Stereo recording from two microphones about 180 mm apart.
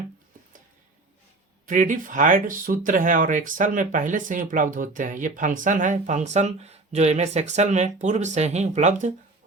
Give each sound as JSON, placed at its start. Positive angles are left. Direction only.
{"t": 1.6, "sound": "speech", "side_deg": -50}